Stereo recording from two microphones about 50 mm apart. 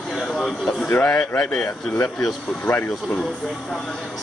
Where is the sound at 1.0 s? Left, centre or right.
Left.